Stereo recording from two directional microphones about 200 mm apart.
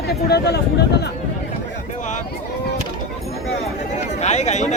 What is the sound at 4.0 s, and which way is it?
Speech, 35° left (ahead or behind).